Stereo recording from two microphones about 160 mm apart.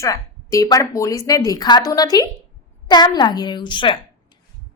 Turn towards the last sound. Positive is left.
turn(degrees=30)  # may be behind; listen again after turning